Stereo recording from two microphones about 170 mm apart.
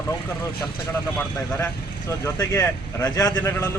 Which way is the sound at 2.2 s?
15° left (ahead or behind).